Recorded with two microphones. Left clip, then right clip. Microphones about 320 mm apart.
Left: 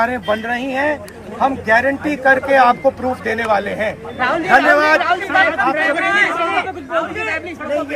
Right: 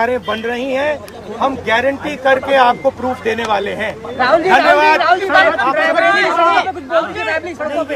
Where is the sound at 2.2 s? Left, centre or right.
Centre.